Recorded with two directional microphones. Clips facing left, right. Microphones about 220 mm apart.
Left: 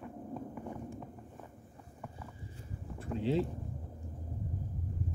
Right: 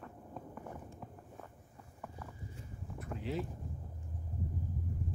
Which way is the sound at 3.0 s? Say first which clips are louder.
Left 7 dB; 30° left (ahead or behind).